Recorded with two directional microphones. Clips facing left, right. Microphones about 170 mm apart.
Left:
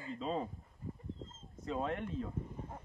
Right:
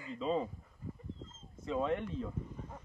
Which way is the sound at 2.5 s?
25° left (ahead or behind).